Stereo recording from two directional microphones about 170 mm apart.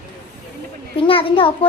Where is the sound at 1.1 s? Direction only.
30° left (ahead or behind).